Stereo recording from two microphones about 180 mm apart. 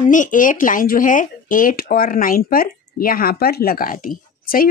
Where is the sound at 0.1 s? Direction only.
45° left (ahead or behind).